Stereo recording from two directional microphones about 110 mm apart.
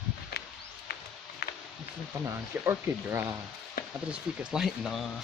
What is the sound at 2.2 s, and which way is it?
Speech, 20° right (ahead or behind).